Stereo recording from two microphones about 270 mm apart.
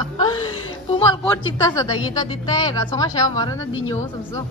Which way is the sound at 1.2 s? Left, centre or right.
Centre.